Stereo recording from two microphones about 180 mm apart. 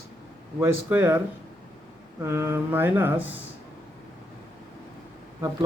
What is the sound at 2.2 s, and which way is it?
Speech, 15° right (ahead or behind).